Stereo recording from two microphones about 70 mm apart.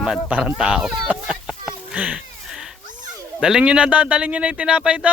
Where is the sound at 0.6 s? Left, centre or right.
Centre.